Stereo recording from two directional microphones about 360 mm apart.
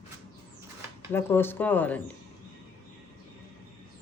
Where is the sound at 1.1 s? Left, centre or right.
Centre.